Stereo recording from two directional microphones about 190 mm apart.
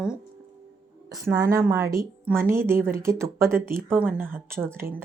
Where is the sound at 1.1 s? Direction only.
15° right (ahead or behind).